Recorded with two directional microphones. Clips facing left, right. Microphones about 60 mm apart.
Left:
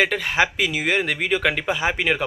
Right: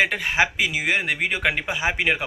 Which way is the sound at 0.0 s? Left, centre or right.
Right.